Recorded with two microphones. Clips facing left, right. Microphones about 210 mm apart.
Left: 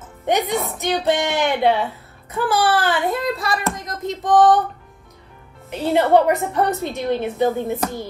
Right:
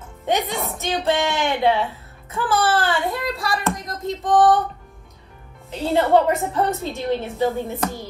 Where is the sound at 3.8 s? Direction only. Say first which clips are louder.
Left 1 dB; centre (ahead or behind).